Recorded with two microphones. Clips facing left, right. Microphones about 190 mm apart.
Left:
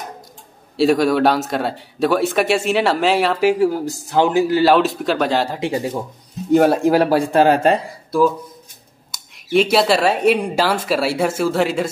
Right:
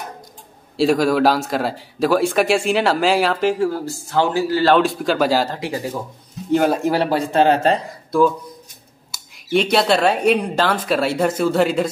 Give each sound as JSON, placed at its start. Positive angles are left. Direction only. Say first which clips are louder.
{"t": 0.7, "sound": "speech", "louder": "left 1 dB", "side_deg": 0}
{"t": 4.7, "sound": "speech", "louder": "even", "side_deg": 0}
{"t": 5.6, "sound": "speech", "louder": "left 4 dB", "side_deg": 25}
{"t": 6.5, "sound": "speech", "louder": "left 4 dB", "side_deg": 5}